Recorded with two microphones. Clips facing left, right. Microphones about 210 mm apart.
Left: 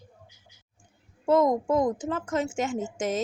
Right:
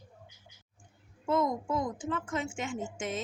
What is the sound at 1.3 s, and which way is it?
A woman's voice, 40° left (ahead or behind).